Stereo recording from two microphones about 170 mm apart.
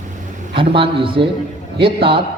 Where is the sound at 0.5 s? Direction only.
30° right (ahead or behind).